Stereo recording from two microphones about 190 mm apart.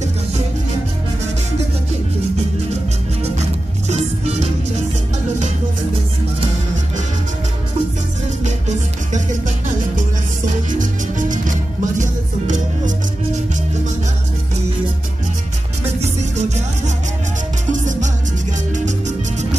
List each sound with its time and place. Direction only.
3.9 s music: 35° right (ahead or behind)
8.5 s music: 40° right (ahead or behind)
10.7 s music: 45° right (ahead or behind)
16.0 s music: 35° right (ahead or behind)